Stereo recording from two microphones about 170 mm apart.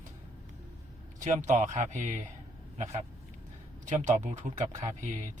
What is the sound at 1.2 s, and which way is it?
Speech, 45° right (ahead or behind).